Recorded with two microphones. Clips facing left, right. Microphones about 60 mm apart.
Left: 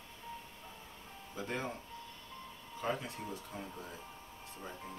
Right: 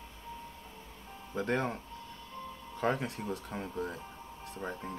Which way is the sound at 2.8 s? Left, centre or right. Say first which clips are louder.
Right 6 dB; right.